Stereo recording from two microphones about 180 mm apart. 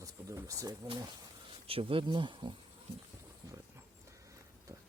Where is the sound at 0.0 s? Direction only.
20° right (ahead or behind).